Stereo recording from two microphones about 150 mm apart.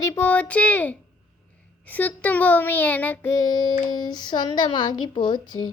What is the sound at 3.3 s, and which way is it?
A woman's voice, 25° left (ahead or behind).